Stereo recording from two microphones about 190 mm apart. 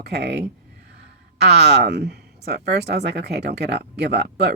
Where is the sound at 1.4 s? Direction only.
60° right (ahead or behind).